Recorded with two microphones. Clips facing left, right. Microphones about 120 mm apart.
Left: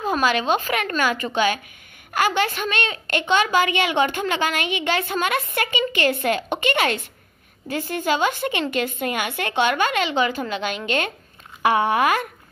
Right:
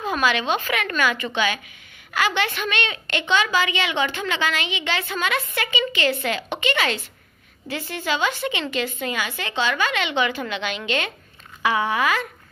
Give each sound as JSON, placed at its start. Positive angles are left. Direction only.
{"t": 0.0, "sound": "a woman's voice", "side_deg": 40}
{"t": 10.0, "sound": "a woman's voice", "side_deg": 40}